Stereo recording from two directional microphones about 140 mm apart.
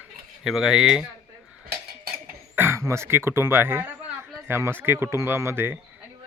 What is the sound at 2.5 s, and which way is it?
Speech, 15° right (ahead or behind).